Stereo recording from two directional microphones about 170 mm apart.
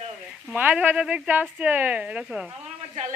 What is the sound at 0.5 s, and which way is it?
Speech, 10° right (ahead or behind).